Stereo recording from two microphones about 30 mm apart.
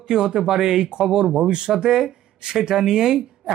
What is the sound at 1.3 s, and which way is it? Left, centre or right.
Speech, centre.